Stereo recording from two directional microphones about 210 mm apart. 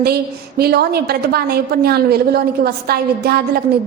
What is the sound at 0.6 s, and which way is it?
A woman's voice, 50° right (ahead or behind).